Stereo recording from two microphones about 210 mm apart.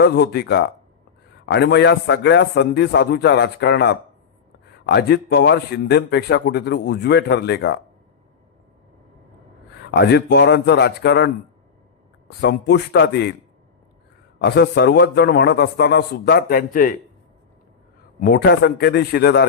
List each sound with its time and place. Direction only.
0.0 s a man's voice: 55° left (ahead or behind)
9.9 s speech: 55° left (ahead or behind)
12.4 s speech: 55° left (ahead or behind)
14.4 s speech: 55° left (ahead or behind)
18.2 s speech: 50° left (ahead or behind)